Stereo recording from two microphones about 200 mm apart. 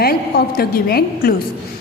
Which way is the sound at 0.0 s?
50° left (ahead or behind).